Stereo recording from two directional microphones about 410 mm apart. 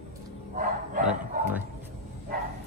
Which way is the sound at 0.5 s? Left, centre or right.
Centre.